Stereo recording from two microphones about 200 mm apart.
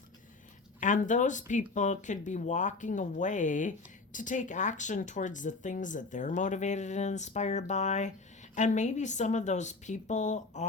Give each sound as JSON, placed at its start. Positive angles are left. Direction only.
{"t": 0.8, "sound": "speech", "side_deg": 40}